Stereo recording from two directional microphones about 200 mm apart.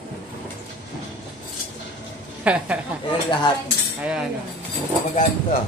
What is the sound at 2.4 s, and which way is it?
Speech, 5° right (ahead or behind).